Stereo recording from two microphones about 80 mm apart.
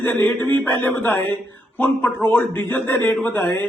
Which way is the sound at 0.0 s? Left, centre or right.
Left.